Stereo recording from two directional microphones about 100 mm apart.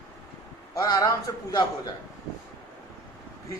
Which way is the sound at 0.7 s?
35° left (ahead or behind).